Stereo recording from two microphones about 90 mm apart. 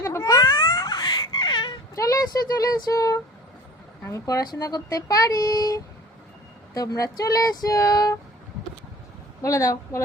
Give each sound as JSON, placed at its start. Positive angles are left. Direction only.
{"t": 0.0, "sound": "a sound", "side_deg": 35}
{"t": 0.4, "sound": "baby cry", "side_deg": 60}
{"t": 2.0, "sound": "a woman's voice", "side_deg": 40}
{"t": 4.5, "sound": "female singing", "side_deg": 40}
{"t": 9.4, "sound": "a woman's voice", "side_deg": 35}